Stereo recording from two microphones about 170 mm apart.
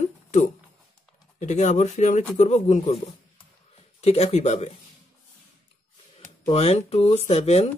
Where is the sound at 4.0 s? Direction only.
40° left (ahead or behind).